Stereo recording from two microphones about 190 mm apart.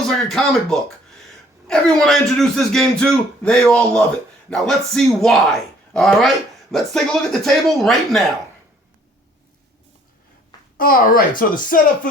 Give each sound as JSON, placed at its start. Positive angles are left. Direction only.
{"t": 0.2, "sound": "speech", "side_deg": 0}
{"t": 10.8, "sound": "speech", "side_deg": 50}